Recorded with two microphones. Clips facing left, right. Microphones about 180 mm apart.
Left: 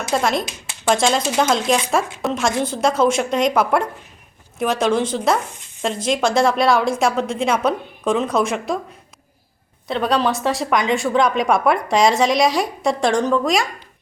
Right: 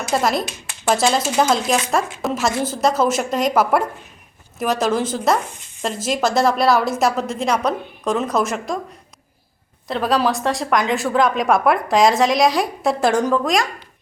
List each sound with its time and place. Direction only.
0.1 s speech: 5° right (ahead or behind)
9.8 s speech: centre (ahead or behind)